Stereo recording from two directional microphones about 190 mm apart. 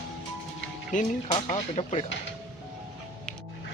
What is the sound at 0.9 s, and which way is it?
Speech, 40° left (ahead or behind).